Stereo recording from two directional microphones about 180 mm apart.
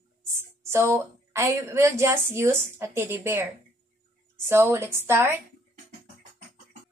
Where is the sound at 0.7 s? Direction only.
15° right (ahead or behind).